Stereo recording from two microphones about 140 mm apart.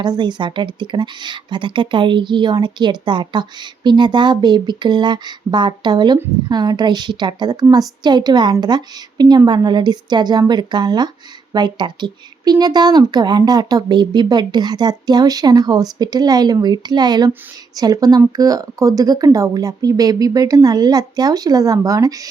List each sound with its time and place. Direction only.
0.0 s a woman's voice: 30° right (ahead or behind)